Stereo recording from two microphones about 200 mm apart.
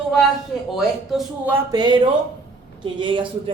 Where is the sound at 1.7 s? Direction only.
20° right (ahead or behind).